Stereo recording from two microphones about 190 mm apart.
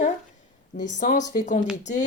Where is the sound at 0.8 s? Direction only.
40° left (ahead or behind).